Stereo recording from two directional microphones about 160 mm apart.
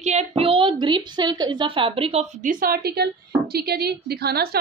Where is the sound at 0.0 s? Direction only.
45° right (ahead or behind).